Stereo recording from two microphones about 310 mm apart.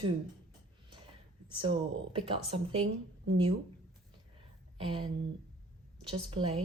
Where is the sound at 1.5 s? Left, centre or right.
Centre.